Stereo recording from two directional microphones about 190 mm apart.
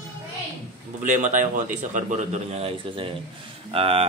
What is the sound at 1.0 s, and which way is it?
Speech, 40° right (ahead or behind).